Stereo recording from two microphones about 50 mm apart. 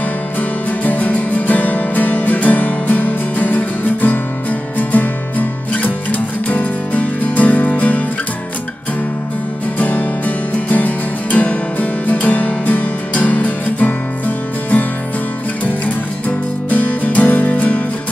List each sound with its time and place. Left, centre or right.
0.4 s music: left
9.8 s music: left
16.3 s music: left